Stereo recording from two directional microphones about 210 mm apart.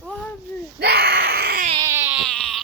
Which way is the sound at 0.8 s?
50° right (ahead or behind).